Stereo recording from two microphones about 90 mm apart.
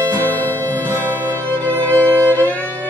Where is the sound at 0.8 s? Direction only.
25° right (ahead or behind).